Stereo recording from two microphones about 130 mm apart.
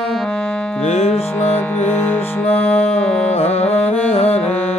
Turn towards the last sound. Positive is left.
turn(degrees=50)  # may be behind; listen again after turning